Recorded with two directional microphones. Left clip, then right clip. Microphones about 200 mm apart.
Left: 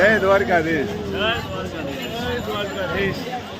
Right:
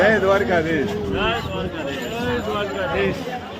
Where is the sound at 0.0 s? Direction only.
20° left (ahead or behind).